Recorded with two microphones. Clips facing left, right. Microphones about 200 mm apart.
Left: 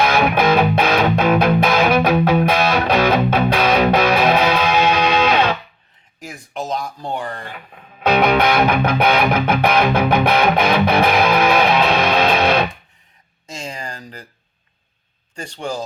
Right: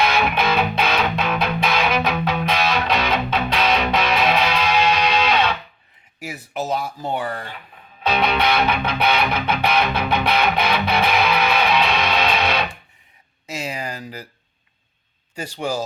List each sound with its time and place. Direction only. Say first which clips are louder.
0.0 s music: left 4 dB; 50° left (ahead or behind)
6.1 s speech: right 1 dB; 5° right (ahead or behind)
8.0 s music: left 5 dB; 50° left (ahead or behind)
13.5 s speech: right 2 dB; 10° right (ahead or behind)
15.4 s speech: right 1 dB; 10° right (ahead or behind)